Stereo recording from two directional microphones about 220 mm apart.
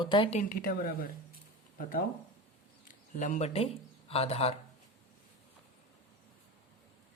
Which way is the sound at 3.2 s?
30° left (ahead or behind).